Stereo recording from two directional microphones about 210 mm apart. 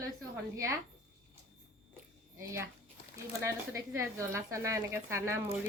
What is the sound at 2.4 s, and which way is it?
A woman's voice, 15° right (ahead or behind).